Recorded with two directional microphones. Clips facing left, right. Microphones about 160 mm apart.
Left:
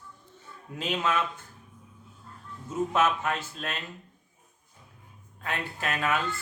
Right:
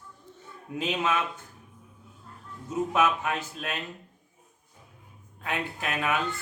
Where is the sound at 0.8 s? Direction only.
20° right (ahead or behind).